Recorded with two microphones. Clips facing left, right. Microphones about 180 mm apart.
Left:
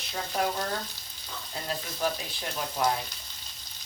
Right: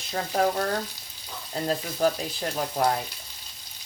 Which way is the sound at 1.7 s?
40° right (ahead or behind).